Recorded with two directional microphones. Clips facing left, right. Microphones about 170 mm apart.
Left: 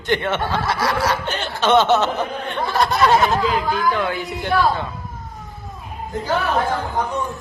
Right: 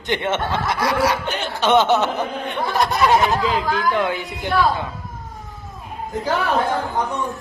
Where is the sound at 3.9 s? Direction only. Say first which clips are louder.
Right 1 dB; 20° right (ahead or behind).